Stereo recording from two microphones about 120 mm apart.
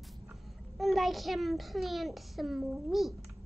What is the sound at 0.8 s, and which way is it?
A child's voice, centre (ahead or behind).